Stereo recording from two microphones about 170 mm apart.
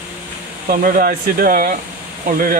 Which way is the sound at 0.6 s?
60° right (ahead or behind).